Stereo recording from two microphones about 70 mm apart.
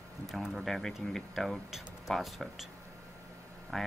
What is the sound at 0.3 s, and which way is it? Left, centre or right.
Speech, centre.